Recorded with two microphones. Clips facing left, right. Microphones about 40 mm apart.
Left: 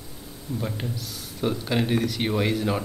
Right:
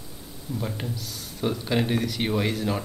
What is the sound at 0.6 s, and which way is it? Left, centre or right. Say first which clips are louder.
Speech: left 1 dB; centre.